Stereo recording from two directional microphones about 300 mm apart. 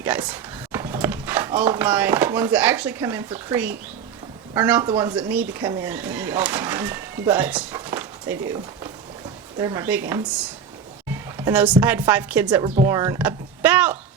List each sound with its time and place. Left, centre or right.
0.0 s speech: centre
11.4 s a woman's voice: centre